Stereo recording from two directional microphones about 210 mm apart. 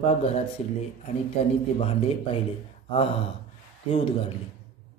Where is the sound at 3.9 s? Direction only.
25° left (ahead or behind).